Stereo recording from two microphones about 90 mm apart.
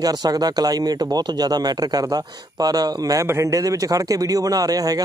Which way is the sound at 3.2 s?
30° right (ahead or behind).